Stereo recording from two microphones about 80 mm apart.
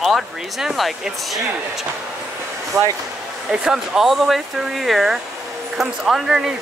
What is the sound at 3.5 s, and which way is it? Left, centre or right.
Speech, centre.